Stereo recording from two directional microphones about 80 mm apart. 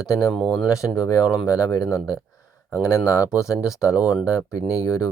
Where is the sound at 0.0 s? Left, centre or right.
Left.